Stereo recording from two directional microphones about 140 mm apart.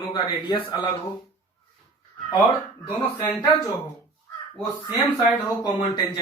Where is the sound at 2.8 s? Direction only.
25° left (ahead or behind).